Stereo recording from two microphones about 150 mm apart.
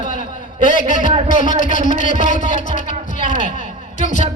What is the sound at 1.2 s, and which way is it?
Speech, 60° left (ahead or behind).